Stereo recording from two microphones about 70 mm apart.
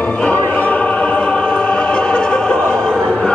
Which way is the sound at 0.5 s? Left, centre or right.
Centre.